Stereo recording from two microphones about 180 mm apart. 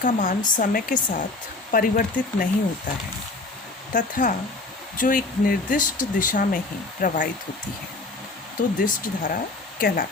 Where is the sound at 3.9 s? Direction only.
45° left (ahead or behind).